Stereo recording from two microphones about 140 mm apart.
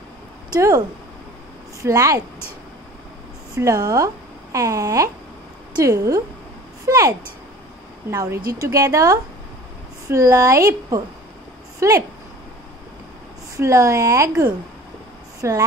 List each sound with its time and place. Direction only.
0.6 s speech: 25° right (ahead or behind)
3.5 s a woman's voice: 25° right (ahead or behind)
13.6 s speech: 20° right (ahead or behind)